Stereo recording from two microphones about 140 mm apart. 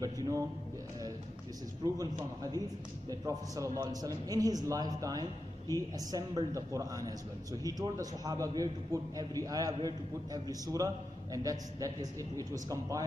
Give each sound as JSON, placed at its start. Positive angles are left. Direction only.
{"t": 0.0, "sound": "a man's voice", "side_deg": -25}
{"t": 2.0, "sound": "a man's voice", "side_deg": -25}